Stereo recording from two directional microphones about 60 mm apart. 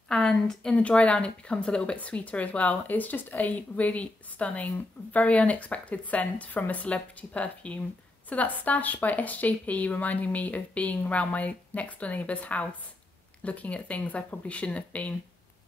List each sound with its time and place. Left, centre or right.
0.1 s speech: centre